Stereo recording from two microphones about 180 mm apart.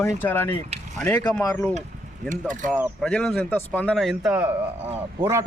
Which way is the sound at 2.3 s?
45° right (ahead or behind).